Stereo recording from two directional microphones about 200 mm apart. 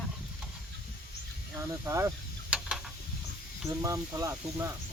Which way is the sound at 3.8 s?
15° right (ahead or behind).